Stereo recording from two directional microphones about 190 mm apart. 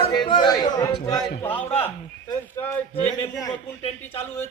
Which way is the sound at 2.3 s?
15° left (ahead or behind).